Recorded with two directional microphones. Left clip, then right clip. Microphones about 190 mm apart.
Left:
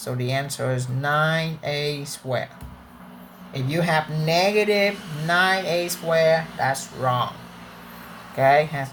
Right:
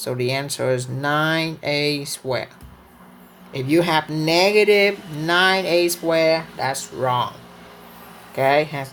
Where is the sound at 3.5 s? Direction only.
40° right (ahead or behind).